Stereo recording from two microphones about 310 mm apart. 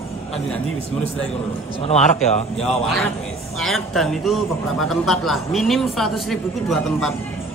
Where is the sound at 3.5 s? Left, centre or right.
Centre.